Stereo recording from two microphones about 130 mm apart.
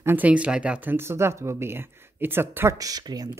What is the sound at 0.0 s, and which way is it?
Speech, 15° right (ahead or behind).